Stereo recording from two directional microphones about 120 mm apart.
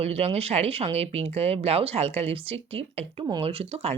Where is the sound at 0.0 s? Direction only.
60° right (ahead or behind).